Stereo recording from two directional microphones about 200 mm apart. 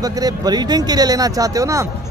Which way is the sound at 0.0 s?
20° right (ahead or behind).